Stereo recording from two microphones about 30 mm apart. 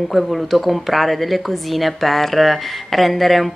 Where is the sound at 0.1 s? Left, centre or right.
Centre.